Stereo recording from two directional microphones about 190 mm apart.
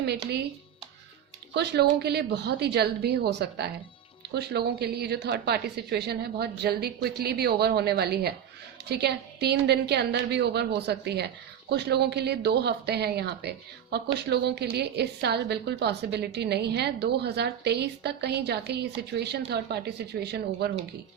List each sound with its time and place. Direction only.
1.5 s a woman's voice: 60° right (ahead or behind)